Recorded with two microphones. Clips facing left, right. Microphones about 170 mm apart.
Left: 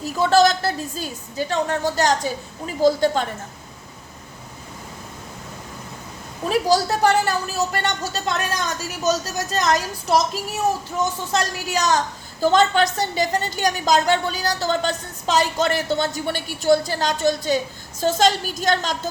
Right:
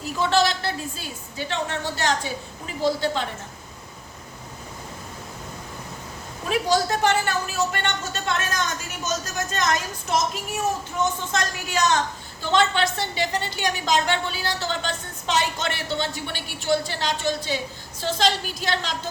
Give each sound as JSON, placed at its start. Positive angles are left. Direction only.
{"t": 0.0, "sound": "a woman's voice", "side_deg": 40}
{"t": 6.5, "sound": "a woman's voice", "side_deg": 35}
{"t": 11.3, "sound": "a woman's voice", "side_deg": 35}